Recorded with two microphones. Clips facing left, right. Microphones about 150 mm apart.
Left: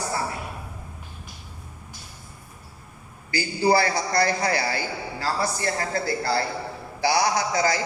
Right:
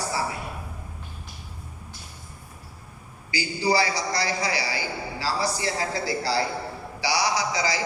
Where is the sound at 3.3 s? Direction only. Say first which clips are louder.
Left 3 dB; 50° left (ahead or behind).